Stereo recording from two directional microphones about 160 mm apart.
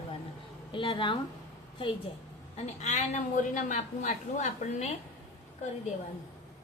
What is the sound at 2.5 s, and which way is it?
A woman's voice, 45° left (ahead or behind).